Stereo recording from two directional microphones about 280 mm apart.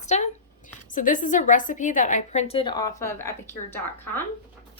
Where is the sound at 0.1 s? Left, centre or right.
Left.